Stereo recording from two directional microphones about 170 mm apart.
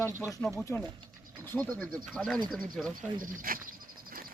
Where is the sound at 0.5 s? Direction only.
15° left (ahead or behind).